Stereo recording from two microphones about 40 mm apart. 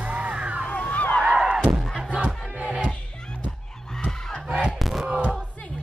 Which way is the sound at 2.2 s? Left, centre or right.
Right.